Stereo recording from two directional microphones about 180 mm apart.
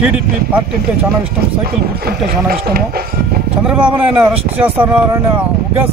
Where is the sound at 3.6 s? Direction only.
5° right (ahead or behind).